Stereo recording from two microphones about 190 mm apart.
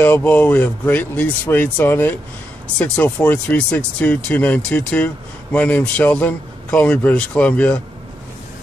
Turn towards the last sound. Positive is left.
turn(degrees=5)  # may be behind; listen again after turning